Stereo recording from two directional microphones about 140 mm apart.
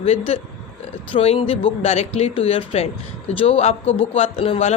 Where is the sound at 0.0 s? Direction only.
45° left (ahead or behind).